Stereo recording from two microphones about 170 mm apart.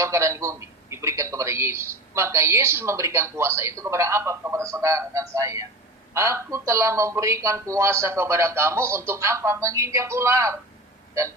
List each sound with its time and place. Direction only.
0.0 s speech: 15° right (ahead or behind)